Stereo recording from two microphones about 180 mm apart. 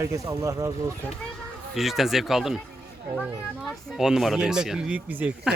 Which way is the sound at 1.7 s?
Centre (ahead or behind).